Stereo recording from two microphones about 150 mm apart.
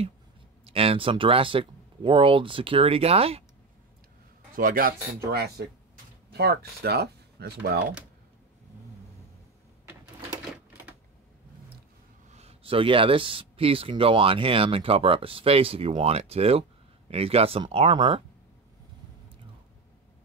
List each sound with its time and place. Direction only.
0.7 s speech: 40° right (ahead or behind)
4.6 s a man's voice: 70° right (ahead or behind)
5.2 s speech: 90° right
12.3 s speech: 45° right (ahead or behind)